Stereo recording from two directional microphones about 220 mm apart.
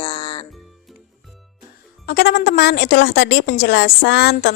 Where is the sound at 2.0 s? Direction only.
45° left (ahead or behind).